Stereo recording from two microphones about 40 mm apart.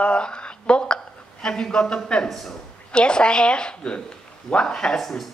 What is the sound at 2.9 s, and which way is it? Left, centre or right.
A man's voice, left.